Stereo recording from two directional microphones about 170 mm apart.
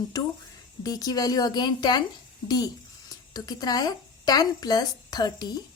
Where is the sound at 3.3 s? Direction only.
25° left (ahead or behind).